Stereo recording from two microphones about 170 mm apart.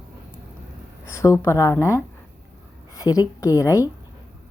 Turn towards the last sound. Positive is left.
turn(degrees=20)  # may be behind; listen again after turning